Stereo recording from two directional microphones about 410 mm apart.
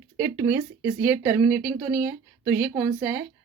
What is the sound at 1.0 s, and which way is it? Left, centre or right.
Speech, centre.